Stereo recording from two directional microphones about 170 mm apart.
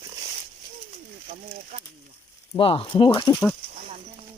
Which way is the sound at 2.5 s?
30° left (ahead or behind).